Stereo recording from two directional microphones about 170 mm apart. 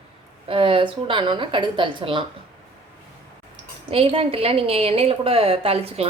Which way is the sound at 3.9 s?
35° right (ahead or behind).